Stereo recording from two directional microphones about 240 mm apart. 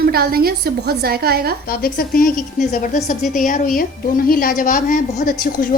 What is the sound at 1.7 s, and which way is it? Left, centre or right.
A woman's voice, left.